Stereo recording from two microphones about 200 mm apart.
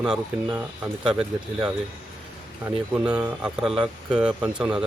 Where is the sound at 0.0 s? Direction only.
5° right (ahead or behind).